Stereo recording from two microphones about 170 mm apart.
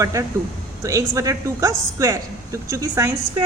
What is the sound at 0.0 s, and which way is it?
A woman's voice, 20° right (ahead or behind).